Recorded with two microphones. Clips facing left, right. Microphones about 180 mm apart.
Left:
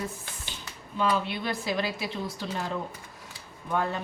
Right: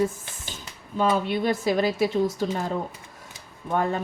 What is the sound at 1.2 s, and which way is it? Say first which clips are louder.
A woman's voice: right 8 dB; 45° right (ahead or behind).